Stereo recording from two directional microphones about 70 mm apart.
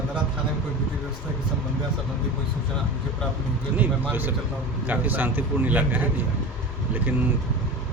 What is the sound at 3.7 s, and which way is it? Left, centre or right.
A man's voice, right.